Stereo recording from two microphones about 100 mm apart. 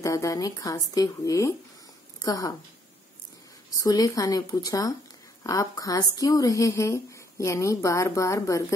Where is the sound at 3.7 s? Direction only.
40° left (ahead or behind).